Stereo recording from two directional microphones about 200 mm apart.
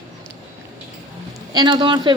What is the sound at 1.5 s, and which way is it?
Speech, 20° right (ahead or behind).